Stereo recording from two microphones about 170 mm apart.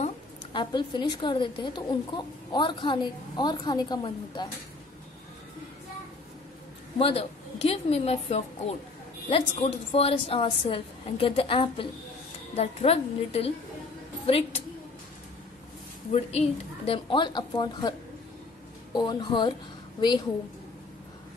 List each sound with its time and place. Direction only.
0.5 s a woman's voice: 25° left (ahead or behind)
7.0 s a woman's voice: 35° left (ahead or behind)
16.1 s a woman's voice: 40° left (ahead or behind)
18.9 s a woman's voice: 25° left (ahead or behind)